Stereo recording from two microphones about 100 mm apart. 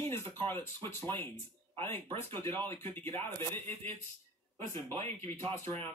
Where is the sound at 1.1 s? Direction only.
25° left (ahead or behind).